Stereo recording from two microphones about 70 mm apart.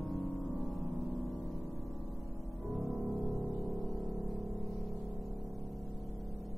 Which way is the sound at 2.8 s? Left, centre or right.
Centre.